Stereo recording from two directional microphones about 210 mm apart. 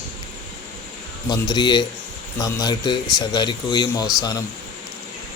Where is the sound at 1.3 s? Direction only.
20° left (ahead or behind).